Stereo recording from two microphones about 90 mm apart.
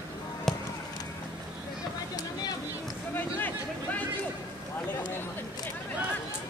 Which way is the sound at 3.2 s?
20° left (ahead or behind).